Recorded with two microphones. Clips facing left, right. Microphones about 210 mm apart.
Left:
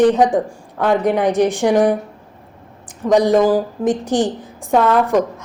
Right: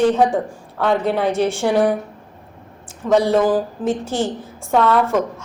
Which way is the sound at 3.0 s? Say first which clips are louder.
Left 2 dB; 15° left (ahead or behind).